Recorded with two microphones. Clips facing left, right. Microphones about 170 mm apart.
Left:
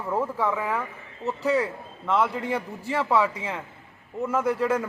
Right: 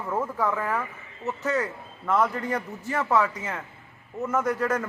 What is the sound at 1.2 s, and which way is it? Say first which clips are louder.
Speech: left 3 dB; 30° left (ahead or behind).